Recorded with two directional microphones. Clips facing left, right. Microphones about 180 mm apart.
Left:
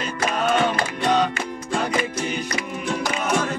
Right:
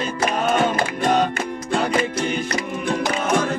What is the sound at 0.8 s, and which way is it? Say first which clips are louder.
Music: right 1 dB; 55° right (ahead or behind).